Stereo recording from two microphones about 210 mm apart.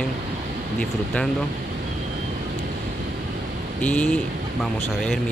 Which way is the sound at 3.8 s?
5° left (ahead or behind).